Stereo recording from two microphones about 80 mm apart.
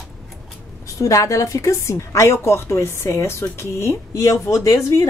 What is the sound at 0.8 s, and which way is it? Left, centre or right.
A woman's voice, left.